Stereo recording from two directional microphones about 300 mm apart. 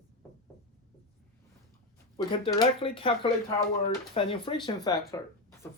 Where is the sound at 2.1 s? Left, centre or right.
Centre.